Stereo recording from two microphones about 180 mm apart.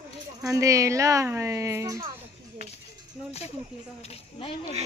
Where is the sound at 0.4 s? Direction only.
15° right (ahead or behind).